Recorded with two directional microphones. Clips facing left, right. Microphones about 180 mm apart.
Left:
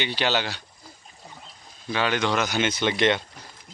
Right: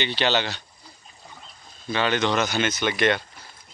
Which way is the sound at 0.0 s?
10° left (ahead or behind).